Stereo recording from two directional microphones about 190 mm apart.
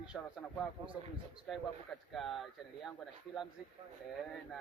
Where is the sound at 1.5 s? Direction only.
Centre (ahead or behind).